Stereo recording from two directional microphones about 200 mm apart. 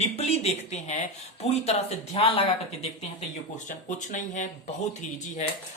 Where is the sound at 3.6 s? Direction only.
40° left (ahead or behind).